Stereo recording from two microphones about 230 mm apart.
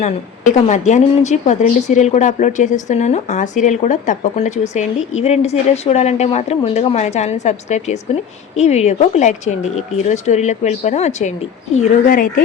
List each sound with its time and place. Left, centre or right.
0.0 s a woman's voice: left